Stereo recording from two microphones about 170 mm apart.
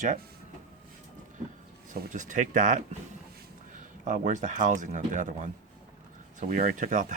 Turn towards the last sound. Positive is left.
turn(degrees=-45)  # may be behind; listen again after turning